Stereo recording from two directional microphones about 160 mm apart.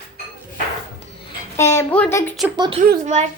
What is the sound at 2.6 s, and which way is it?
Speech, 30° right (ahead or behind).